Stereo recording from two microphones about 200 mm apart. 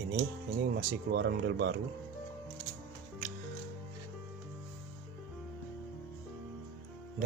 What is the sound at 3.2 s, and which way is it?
Music, 40° right (ahead or behind).